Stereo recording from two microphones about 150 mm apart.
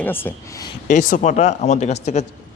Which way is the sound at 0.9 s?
60° left (ahead or behind).